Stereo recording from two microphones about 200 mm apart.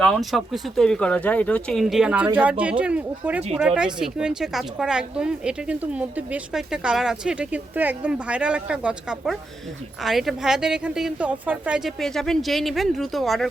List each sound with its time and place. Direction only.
0.0 s speech: centre (ahead or behind)